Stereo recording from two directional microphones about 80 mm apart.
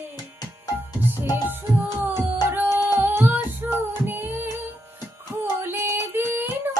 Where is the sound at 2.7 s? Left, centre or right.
Left.